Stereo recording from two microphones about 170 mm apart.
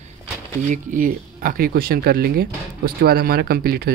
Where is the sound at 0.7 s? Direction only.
50° right (ahead or behind).